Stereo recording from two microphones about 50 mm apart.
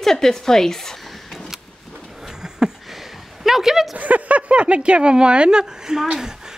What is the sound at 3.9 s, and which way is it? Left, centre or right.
Speech, right.